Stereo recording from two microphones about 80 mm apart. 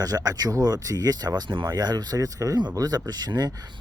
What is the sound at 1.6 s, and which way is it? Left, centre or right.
Speech, right.